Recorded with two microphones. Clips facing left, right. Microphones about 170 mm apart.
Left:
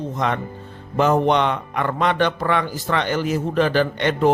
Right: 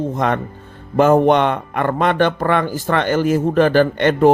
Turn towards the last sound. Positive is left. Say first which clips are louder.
# right 5 dB
turn(degrees=-50)  # may be behind; listen again after turning